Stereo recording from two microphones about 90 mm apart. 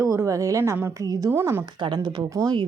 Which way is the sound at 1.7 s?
55° right (ahead or behind).